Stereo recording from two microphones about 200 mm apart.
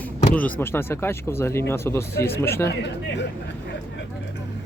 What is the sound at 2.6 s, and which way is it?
Speech, 60° left (ahead or behind).